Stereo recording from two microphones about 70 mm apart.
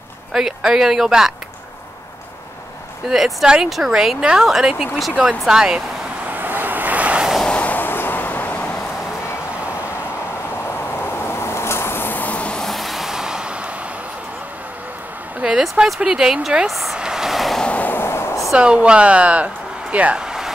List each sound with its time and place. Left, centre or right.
0.3 s a woman's voice: centre
3.1 s a woman's voice: centre
6.3 s vehicle: right
7.4 s vehicle: left
10.6 s vehicle: left; by 12.6 s centre
12.6 s vehicle: centre
15.4 s a woman's voice: centre
16.9 s vehicle: centre
17.6 s a sound: left
18.6 s speech: centre